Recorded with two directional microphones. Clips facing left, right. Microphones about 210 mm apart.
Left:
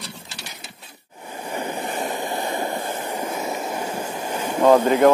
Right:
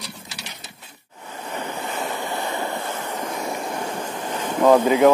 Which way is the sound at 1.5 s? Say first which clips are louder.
Left 2 dB; 10° left (ahead or behind).